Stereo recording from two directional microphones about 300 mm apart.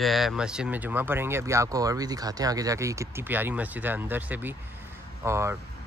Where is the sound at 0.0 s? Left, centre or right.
Centre.